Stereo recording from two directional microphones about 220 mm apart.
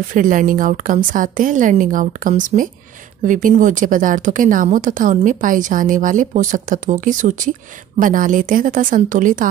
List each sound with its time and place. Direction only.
0.1 s a woman's voice: 35° right (ahead or behind)